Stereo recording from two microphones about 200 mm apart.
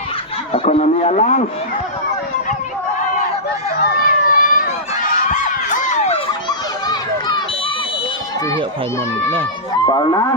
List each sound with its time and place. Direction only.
0.5 s a man's voice: 30° left (ahead or behind)
3.8 s run: 50° left (ahead or behind)
5.3 s crowd: 40° left (ahead or behind)
6.8 s run: 20° left (ahead or behind)
9.8 s speech: 20° left (ahead or behind)